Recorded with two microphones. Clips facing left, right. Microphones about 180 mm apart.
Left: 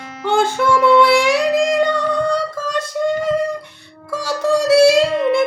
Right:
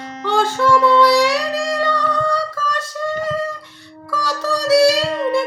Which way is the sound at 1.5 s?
20° left (ahead or behind).